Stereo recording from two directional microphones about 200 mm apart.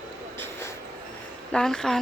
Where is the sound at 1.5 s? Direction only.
5° left (ahead or behind).